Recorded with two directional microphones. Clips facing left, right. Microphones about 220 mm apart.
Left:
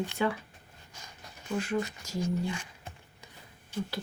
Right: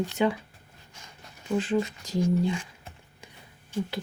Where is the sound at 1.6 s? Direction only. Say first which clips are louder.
Right 4 dB; 20° right (ahead or behind).